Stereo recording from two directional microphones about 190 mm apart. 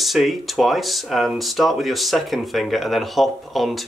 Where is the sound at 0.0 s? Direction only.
Centre (ahead or behind).